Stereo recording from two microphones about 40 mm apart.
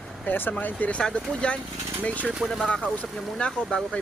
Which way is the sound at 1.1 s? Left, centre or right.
Left.